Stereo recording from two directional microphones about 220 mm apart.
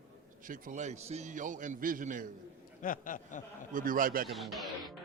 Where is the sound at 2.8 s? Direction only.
35° left (ahead or behind).